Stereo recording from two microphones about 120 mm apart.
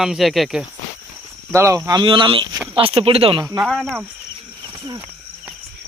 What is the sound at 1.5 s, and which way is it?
Speech, 25° right (ahead or behind).